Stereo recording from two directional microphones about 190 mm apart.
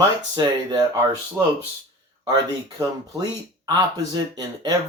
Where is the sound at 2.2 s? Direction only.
20° right (ahead or behind).